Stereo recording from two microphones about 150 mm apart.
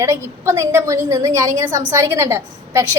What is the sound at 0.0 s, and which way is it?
A woman's voice, 20° right (ahead or behind).